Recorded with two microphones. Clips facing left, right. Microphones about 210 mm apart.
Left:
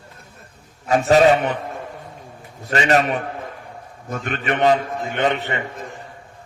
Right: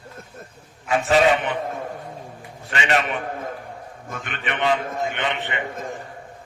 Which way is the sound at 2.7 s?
40° left (ahead or behind).